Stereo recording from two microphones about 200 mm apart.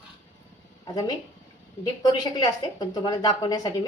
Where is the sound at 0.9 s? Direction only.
20° left (ahead or behind).